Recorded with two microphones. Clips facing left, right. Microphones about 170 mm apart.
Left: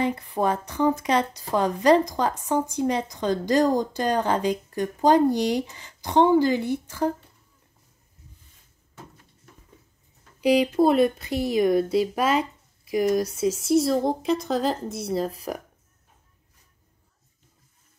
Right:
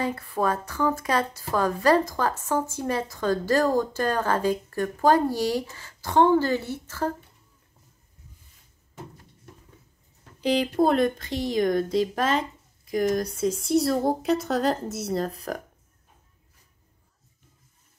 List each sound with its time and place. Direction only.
0.0 s a woman's voice: 20° left (ahead or behind)
10.4 s speech: 5° left (ahead or behind)